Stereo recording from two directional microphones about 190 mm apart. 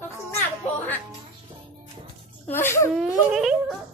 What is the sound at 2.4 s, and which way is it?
Speech, 10° left (ahead or behind).